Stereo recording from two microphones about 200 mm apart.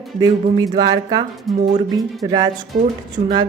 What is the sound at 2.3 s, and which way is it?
Speech, 20° right (ahead or behind).